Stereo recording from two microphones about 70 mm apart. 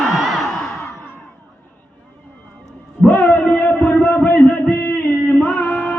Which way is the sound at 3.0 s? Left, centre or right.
Left.